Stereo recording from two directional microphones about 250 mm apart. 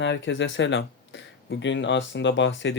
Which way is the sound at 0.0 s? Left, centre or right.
Left.